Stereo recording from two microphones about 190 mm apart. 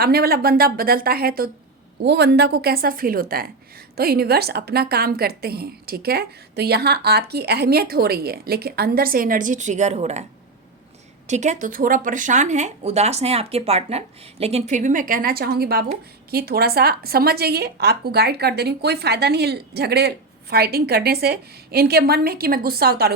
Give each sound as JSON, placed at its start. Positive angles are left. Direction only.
{"t": 0.0, "sound": "a woman's voice", "side_deg": -55}
{"t": 11.3, "sound": "a woman's voice", "side_deg": -40}